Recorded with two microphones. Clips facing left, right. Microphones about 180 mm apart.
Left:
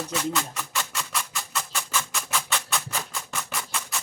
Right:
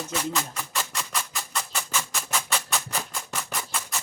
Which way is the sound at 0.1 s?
5° right (ahead or behind).